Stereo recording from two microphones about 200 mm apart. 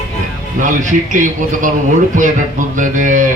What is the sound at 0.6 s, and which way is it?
Speech, 40° right (ahead or behind).